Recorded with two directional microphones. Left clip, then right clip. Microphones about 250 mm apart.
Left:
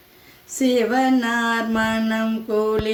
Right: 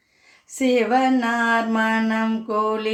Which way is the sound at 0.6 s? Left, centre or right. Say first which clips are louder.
Even; centre.